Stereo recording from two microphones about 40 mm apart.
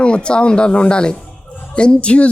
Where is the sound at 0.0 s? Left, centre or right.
Left.